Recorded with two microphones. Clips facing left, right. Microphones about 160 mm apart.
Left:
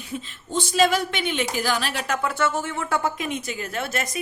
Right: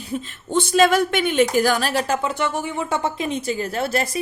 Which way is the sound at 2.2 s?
20° right (ahead or behind).